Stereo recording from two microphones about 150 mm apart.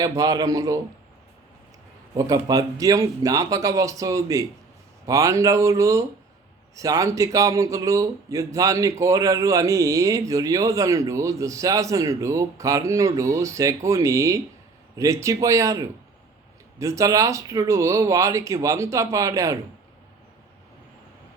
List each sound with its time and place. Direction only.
0.0 s speech: 25° right (ahead or behind)
2.1 s speech: 25° right (ahead or behind)